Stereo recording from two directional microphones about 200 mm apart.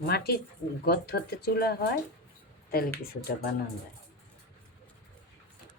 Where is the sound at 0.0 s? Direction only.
50° left (ahead or behind).